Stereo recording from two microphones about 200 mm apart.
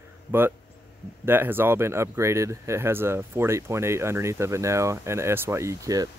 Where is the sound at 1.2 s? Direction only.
10° right (ahead or behind).